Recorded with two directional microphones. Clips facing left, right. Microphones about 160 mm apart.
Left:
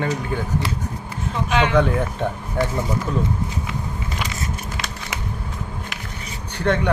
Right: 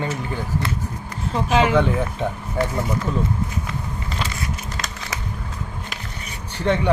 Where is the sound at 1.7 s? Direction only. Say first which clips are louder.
Left 1 dB; centre (ahead or behind).